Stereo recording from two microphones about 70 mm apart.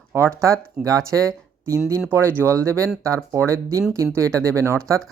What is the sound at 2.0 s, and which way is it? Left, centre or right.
Speech, right.